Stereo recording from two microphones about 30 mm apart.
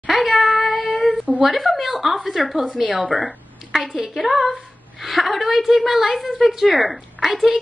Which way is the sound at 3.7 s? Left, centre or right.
Centre.